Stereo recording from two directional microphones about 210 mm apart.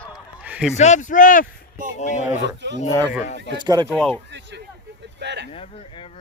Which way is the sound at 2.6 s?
55° right (ahead or behind).